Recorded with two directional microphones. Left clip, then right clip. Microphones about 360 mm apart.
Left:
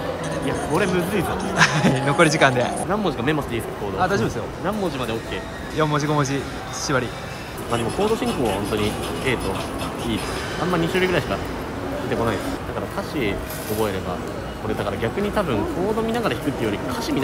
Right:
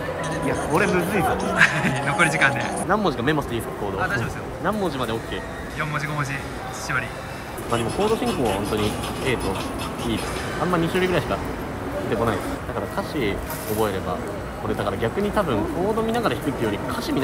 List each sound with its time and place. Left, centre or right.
0.3 s a man's voice: centre
7.7 s speech: centre
10.7 s speech: centre
12.9 s speech: centre